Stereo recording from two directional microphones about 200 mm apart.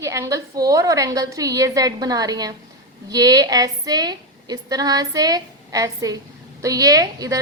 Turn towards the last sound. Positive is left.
turn(degrees=-15)  # may be behind; listen again after turning